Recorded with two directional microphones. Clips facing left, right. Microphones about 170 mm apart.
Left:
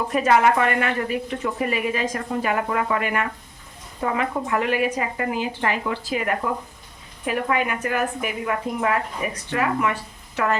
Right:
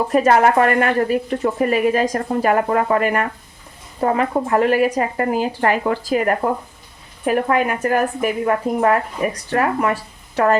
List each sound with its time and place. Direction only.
0.1 s a woman's voice: 45° right (ahead or behind)